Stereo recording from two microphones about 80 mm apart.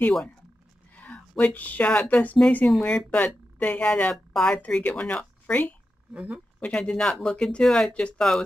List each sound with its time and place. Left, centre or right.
1.0 s a woman's voice: centre
6.1 s speech: centre
6.6 s a woman's voice: centre